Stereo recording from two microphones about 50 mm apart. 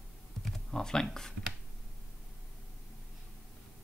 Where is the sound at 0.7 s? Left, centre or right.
Centre.